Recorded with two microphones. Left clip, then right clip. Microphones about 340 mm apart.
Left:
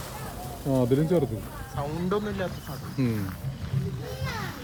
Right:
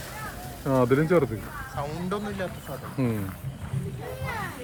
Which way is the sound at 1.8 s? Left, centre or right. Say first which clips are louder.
Left 3 dB; centre.